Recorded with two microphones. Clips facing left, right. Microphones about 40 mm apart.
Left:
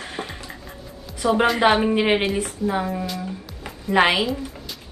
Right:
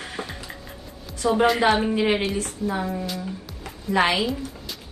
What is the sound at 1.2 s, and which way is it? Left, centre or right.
A woman's voice, left.